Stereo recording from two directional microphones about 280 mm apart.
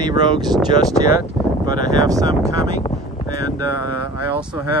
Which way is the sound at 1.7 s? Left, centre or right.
Centre.